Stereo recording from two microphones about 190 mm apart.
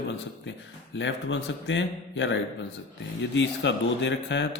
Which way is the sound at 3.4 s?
70° left (ahead or behind).